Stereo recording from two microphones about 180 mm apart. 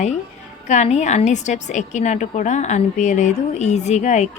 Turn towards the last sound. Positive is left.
turn(degrees=40)  # may be behind; listen again after turning